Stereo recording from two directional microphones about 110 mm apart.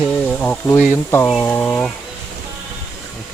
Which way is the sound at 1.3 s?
15° left (ahead or behind).